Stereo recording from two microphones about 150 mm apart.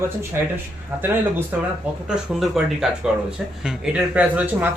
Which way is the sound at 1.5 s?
10° right (ahead or behind).